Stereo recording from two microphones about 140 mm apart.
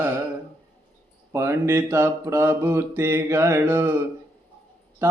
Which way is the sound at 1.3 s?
20° right (ahead or behind).